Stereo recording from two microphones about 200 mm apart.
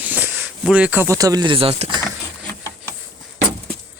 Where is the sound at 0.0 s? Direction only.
10° right (ahead or behind); by 2.0 s 25° right (ahead or behind).